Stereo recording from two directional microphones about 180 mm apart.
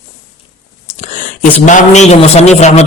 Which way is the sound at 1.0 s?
40° left (ahead or behind).